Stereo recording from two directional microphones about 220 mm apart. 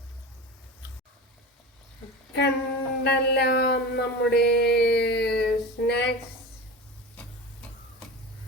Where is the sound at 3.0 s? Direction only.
50° left (ahead or behind).